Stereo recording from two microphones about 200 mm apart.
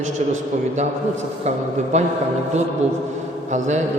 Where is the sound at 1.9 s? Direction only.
35° right (ahead or behind).